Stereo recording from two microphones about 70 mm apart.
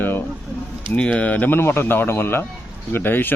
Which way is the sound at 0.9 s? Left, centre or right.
Centre.